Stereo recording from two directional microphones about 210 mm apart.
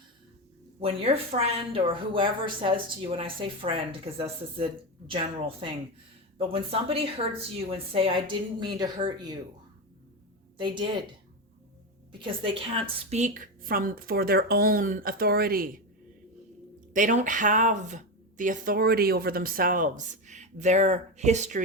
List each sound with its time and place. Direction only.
0.8 s a woman's voice: 25° right (ahead or behind)
10.6 s a woman's voice: 20° right (ahead or behind)
12.2 s a woman's voice: 25° right (ahead or behind); by 15.7 s 45° right (ahead or behind)
16.9 s speech: 40° right (ahead or behind)